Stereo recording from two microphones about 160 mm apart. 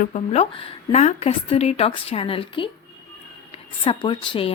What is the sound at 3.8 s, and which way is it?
Speech, 30° left (ahead or behind).